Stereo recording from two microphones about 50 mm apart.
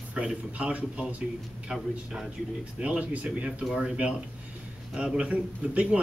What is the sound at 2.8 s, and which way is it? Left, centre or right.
Speech, right.